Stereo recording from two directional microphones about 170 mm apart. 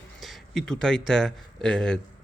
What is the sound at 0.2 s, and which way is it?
Speech, centre (ahead or behind).